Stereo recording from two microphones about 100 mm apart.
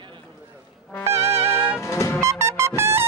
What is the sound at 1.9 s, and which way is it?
Music, 30° left (ahead or behind).